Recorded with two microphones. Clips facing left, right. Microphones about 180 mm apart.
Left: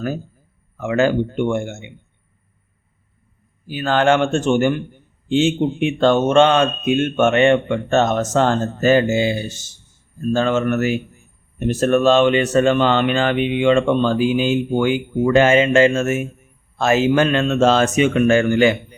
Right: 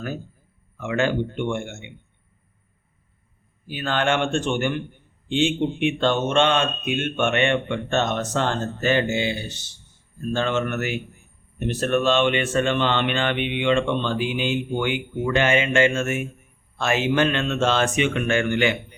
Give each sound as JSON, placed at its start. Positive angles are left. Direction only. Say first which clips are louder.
{"t": 0.8, "sound": "speech", "louder": "left 6 dB", "side_deg": 40}
{"t": 3.7, "sound": "speech", "louder": "left 7 dB", "side_deg": 40}